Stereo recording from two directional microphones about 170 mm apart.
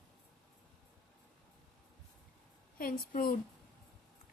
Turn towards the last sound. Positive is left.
turn(degrees=55)  # may be behind; listen again after turning